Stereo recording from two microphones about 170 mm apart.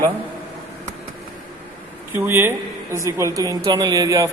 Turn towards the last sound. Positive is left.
turn(degrees=-20)  # may be behind; listen again after turning